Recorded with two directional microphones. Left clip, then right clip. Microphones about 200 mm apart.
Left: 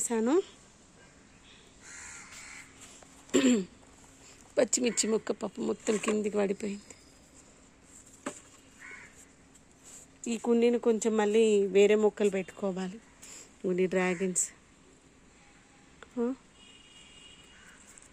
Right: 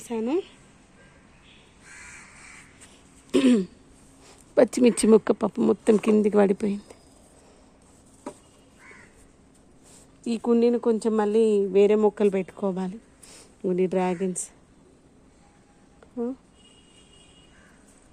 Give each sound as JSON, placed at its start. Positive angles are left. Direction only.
{"t": 0.0, "sound": "a woman's voice", "side_deg": 20}
{"t": 3.3, "sound": "throat clearing", "side_deg": -5}
{"t": 4.5, "sound": "speech", "side_deg": -15}
{"t": 10.2, "sound": "speech", "side_deg": -10}